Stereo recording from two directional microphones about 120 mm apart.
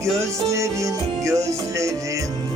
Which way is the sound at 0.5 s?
25° right (ahead or behind).